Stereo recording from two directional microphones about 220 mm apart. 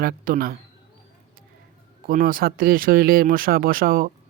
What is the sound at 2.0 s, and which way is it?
Speech, 40° right (ahead or behind).